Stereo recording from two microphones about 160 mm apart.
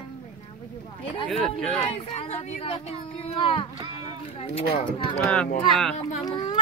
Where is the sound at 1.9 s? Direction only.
40° left (ahead or behind).